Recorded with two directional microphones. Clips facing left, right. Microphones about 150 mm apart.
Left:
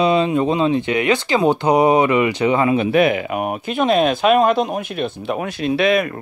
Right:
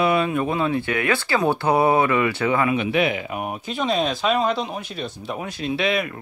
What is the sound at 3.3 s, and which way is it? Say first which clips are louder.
Speech: left 6 dB; 70° left (ahead or behind).